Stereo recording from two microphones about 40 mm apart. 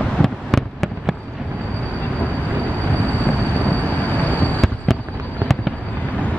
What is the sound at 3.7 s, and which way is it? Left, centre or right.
Train, left.